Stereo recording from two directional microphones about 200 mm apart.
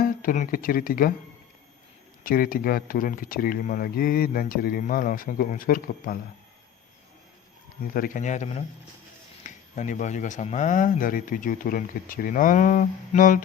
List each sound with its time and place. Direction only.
0.0 s speech: 45° left (ahead or behind)
2.2 s speech: 45° left (ahead or behind)
7.9 s speech: 40° left (ahead or behind)